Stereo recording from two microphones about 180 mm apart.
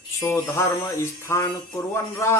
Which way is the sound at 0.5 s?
15° left (ahead or behind).